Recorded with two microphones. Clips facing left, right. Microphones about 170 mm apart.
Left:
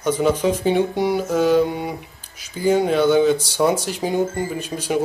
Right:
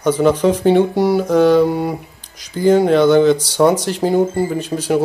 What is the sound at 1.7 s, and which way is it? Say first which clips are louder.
Speech: right 7 dB; 40° right (ahead or behind).